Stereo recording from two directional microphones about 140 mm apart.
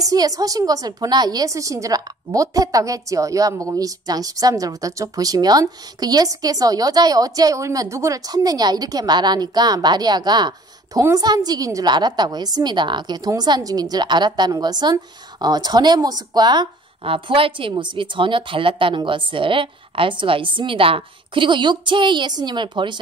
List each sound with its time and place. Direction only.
0.0 s a woman's voice: 25° right (ahead or behind)